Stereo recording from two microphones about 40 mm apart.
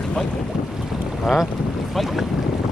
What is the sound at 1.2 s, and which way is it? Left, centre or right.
Boat, centre.